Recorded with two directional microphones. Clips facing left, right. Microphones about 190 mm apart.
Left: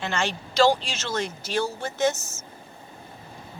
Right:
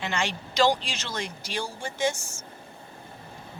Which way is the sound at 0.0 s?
15° right (ahead or behind).